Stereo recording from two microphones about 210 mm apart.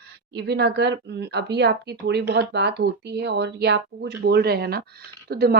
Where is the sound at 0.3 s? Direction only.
50° right (ahead or behind).